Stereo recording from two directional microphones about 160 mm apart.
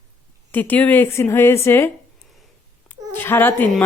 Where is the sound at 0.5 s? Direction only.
10° left (ahead or behind).